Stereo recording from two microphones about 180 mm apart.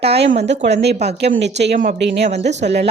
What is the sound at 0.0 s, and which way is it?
A woman's voice, 65° right (ahead or behind).